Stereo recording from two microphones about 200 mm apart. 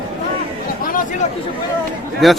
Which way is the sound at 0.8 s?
45° left (ahead or behind).